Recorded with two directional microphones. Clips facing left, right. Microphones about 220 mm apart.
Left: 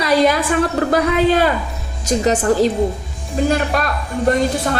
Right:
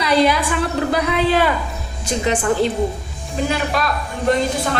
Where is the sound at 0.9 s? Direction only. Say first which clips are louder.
Left 4 dB; 45° left (ahead or behind).